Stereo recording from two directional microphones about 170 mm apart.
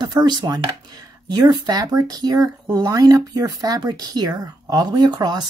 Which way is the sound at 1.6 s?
20° right (ahead or behind).